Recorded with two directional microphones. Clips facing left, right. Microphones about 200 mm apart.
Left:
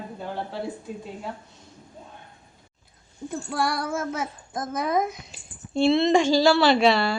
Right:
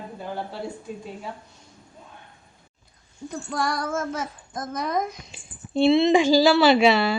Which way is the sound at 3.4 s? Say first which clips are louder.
Even; 5° left (ahead or behind).